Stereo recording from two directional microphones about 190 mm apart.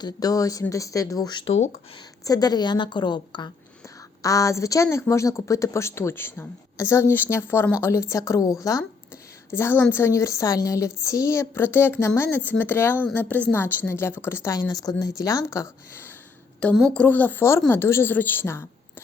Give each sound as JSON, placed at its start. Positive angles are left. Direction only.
{"t": 0.0, "sound": "a woman's voice", "side_deg": 20}